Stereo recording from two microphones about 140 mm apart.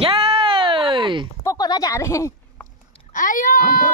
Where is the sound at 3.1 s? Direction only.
65° left (ahead or behind).